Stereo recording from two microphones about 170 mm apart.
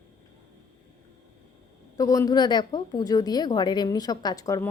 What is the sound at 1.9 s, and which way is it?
A woman's voice, 20° left (ahead or behind).